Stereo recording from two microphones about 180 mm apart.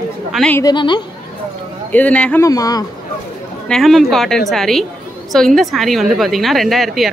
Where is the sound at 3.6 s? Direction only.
Centre (ahead or behind).